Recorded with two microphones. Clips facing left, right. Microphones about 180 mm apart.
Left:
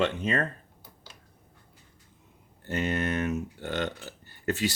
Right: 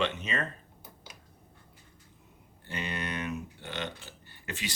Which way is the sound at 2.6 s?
45° left (ahead or behind).